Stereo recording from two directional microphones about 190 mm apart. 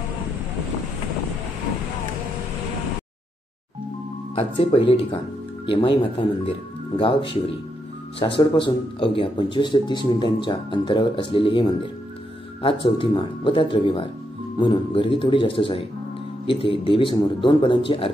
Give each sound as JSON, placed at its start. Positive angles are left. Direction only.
{"t": 4.4, "sound": "speech", "side_deg": 30}